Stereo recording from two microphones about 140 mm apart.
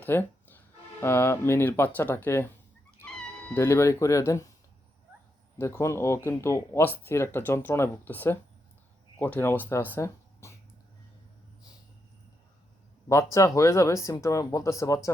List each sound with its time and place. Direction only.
0.0 s music: 15° left (ahead or behind)
1.0 s speech: 15° left (ahead or behind)
3.0 s music: 10° left (ahead or behind)
3.6 s speech: 20° left (ahead or behind)
5.5 s speech: 20° left (ahead or behind)
13.3 s speech: 20° left (ahead or behind)